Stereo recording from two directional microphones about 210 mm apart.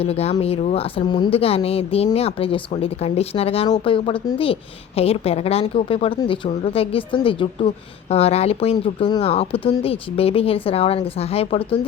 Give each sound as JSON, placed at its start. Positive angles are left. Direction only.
{"t": 0.0, "sound": "speech", "side_deg": 30}